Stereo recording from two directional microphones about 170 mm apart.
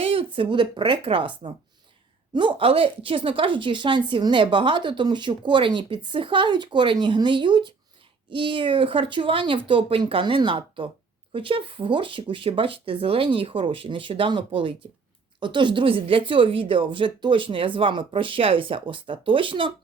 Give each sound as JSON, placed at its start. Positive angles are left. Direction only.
{"t": 0.0, "sound": "a sound", "side_deg": -30}
{"t": 0.3, "sound": "speech", "side_deg": -30}
{"t": 2.3, "sound": "a woman's voice", "side_deg": -30}